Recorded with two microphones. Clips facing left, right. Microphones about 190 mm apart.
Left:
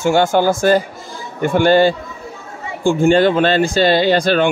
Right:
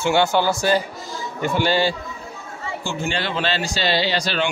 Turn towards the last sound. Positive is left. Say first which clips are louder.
# left 9 dB
turn(degrees=50)  # may be behind; listen again after turning